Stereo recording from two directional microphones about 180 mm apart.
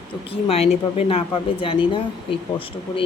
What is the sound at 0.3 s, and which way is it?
A woman's voice, 30° left (ahead or behind).